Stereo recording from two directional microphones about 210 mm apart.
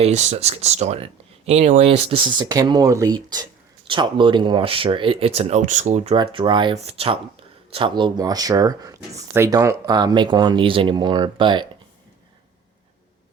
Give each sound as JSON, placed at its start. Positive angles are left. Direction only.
{"t": 0.0, "sound": "speech", "side_deg": -30}
{"t": 2.4, "sound": "speech", "side_deg": -20}